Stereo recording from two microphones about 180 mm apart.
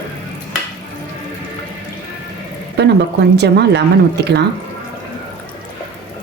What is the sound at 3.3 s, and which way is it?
Speech, 70° right (ahead or behind).